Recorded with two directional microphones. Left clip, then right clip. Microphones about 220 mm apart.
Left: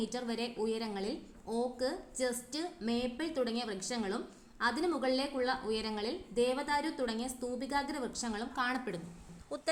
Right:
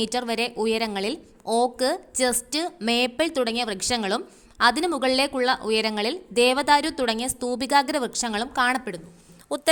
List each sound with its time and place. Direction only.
0.0 s a woman's voice: 35° right (ahead or behind)